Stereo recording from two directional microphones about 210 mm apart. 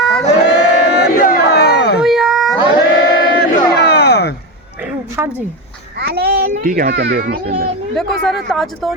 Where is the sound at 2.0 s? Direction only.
Centre (ahead or behind).